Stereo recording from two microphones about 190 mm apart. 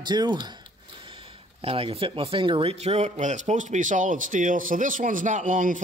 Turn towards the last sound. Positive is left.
turn(degrees=-45)  # may be behind; listen again after turning